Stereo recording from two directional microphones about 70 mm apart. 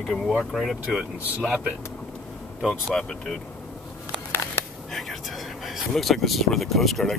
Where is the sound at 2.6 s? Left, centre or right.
Centre.